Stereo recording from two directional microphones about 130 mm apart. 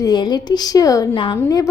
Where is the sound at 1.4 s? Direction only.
25° left (ahead or behind).